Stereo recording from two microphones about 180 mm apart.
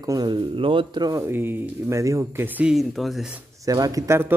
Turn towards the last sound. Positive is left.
turn(degrees=-15)  # may be behind; listen again after turning